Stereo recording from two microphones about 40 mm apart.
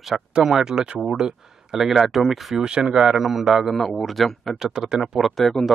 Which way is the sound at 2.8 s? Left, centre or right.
Centre.